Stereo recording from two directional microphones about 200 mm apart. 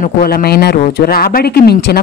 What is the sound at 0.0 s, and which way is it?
Speech, 50° left (ahead or behind).